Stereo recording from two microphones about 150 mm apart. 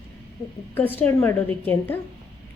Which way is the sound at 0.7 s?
10° left (ahead or behind).